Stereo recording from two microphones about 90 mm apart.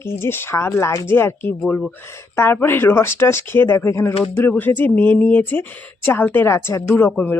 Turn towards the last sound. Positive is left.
turn(degrees=30)  # may be behind; listen again after turning